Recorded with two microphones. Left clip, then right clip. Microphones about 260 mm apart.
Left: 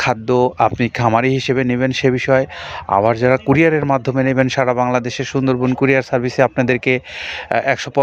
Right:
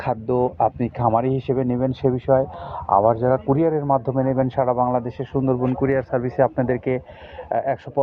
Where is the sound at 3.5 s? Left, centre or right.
Left.